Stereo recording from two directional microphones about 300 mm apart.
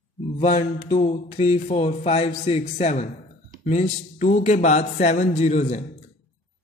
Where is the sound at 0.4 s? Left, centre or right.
Left.